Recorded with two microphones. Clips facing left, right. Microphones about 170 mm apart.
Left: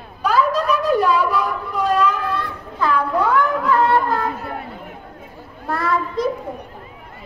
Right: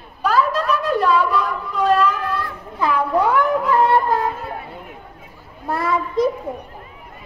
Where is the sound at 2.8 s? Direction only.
15° right (ahead or behind).